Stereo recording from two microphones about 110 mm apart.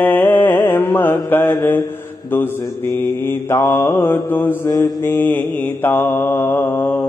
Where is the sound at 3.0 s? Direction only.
20° left (ahead or behind).